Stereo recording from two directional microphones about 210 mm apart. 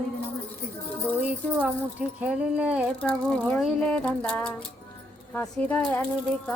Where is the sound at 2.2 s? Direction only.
5° right (ahead or behind).